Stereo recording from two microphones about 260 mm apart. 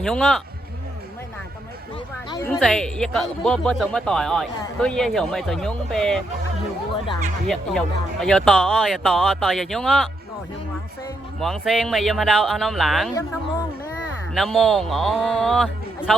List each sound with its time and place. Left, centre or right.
0.0 s speech: centre
2.3 s speech: centre
7.4 s speech: centre
11.3 s speech: centre
14.3 s speech: centre